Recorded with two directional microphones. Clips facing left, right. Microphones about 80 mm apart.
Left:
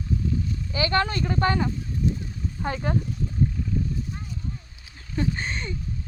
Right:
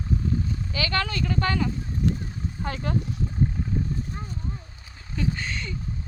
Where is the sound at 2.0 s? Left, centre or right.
Right.